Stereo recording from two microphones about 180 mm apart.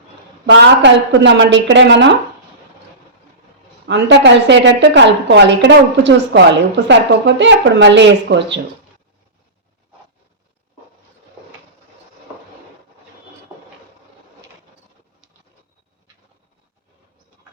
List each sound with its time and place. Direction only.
0.4 s a woman's voice: 80° right
3.8 s a woman's voice: 75° right (ahead or behind)